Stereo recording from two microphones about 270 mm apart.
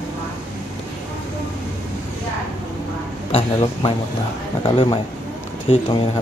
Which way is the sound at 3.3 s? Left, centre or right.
Centre.